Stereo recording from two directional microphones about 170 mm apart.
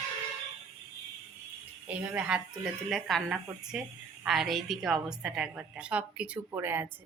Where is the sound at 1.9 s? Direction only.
10° right (ahead or behind).